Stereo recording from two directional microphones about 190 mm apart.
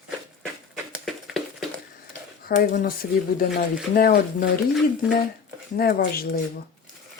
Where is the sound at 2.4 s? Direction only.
55° left (ahead or behind).